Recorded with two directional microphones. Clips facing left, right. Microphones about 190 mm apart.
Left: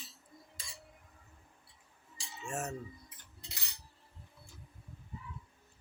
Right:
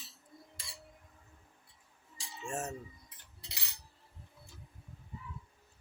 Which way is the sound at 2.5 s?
25° right (ahead or behind).